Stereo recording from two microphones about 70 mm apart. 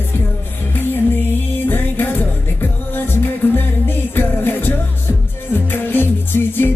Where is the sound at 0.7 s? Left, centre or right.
Left.